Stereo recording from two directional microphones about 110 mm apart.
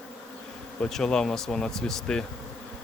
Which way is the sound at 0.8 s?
5° left (ahead or behind).